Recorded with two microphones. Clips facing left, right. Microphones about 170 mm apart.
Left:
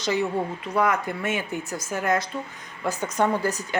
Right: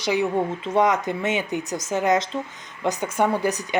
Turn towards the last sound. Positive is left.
turn(degrees=-15)  # may be behind; listen again after turning